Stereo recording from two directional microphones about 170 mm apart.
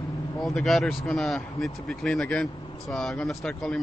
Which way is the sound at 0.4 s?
Centre (ahead or behind).